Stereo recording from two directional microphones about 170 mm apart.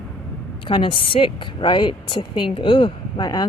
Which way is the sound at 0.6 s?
30° left (ahead or behind).